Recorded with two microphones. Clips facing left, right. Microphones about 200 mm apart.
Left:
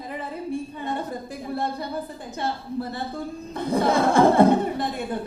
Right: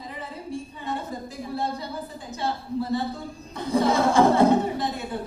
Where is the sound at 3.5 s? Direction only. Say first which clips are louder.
Even; 55° left (ahead or behind).